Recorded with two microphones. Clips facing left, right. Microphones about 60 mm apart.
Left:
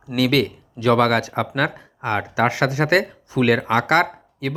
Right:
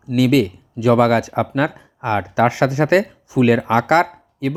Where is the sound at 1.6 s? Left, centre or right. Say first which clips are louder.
Right 3 dB; left.